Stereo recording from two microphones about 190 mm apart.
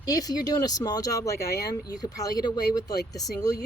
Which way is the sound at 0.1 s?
20° left (ahead or behind).